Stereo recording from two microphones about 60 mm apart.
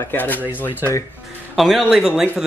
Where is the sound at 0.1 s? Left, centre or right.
Left.